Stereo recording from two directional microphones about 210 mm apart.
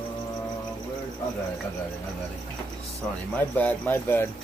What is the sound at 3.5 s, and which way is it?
Speech, 10° left (ahead or behind).